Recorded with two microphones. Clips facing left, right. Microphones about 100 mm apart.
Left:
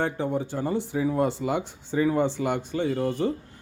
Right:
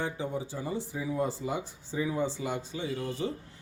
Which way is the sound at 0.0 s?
60° left (ahead or behind).